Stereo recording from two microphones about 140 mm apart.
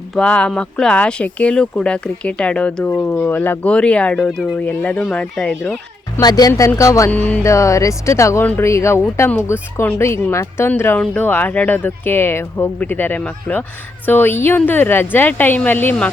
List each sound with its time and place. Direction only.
0.1 s speech: 5° left (ahead or behind)
6.1 s speech: 25° left (ahead or behind)
7.1 s speech: 10° left (ahead or behind)